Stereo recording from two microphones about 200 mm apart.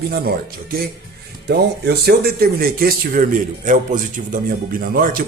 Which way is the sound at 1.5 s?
55° right (ahead or behind).